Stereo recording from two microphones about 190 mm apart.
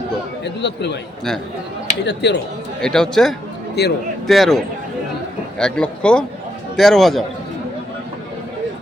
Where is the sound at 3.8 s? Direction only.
60° left (ahead or behind).